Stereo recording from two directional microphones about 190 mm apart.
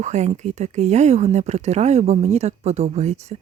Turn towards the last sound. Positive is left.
turn(degrees=-35)  # may be behind; listen again after turning